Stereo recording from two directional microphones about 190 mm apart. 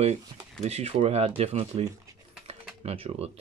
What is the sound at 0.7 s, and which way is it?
Speech, 35° right (ahead or behind).